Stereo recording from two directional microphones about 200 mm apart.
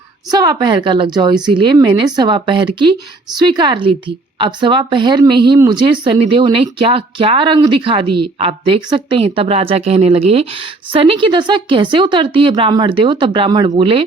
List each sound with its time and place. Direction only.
0.3 s speech: 20° right (ahead or behind)